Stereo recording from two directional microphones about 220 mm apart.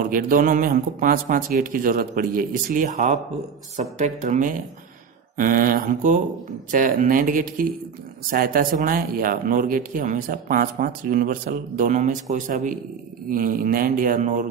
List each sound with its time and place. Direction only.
0.0 s speech: 40° right (ahead or behind)